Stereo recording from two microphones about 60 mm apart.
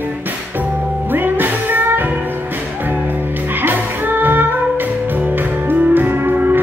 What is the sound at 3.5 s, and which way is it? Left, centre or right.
Music, right.